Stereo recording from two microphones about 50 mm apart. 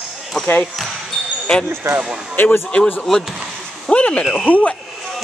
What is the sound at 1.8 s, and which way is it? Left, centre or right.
Speech, right.